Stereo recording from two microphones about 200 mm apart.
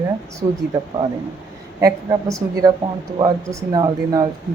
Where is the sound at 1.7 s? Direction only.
15° right (ahead or behind).